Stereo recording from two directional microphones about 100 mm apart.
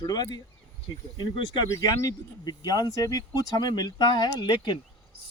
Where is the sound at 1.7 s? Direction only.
40° left (ahead or behind).